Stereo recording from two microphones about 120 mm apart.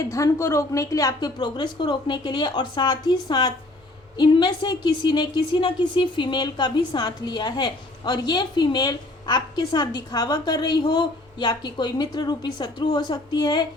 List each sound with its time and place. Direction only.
0.1 s a woman's voice: 25° left (ahead or behind)